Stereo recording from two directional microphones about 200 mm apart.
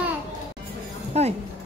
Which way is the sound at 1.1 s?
30° right (ahead or behind).